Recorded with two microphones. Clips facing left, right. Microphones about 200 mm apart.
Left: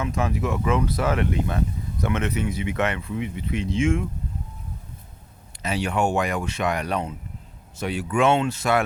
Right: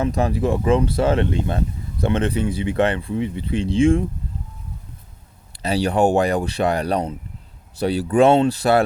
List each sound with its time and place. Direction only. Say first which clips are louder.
0.0 s speech: right 5 dB; 35° right (ahead or behind)
5.6 s speech: right 6 dB; 35° right (ahead or behind)